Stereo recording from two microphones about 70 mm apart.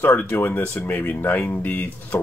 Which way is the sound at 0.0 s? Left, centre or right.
Left.